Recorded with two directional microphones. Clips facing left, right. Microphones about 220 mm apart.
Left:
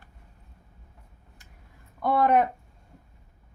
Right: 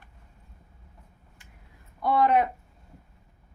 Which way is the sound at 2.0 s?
50° left (ahead or behind).